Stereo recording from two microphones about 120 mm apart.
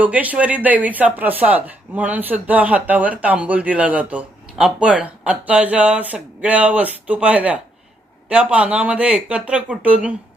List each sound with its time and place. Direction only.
0.0 s speech: 10° right (ahead or behind)